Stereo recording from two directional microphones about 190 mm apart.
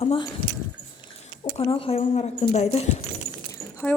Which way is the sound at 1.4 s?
25° left (ahead or behind).